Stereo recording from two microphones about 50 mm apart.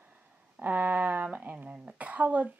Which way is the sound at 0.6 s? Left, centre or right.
Right.